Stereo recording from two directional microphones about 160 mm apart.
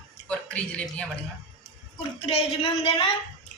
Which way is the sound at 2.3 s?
40° left (ahead or behind).